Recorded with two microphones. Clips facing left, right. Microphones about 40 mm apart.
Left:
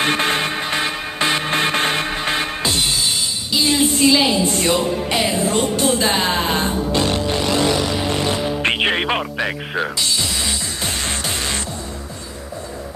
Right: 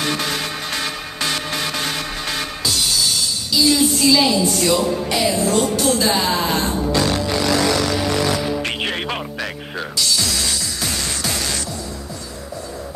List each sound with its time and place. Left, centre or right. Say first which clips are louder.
0.0 s music: left 4 dB; left